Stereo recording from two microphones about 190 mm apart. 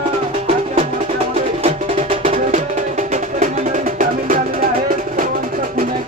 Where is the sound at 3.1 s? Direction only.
40° right (ahead or behind).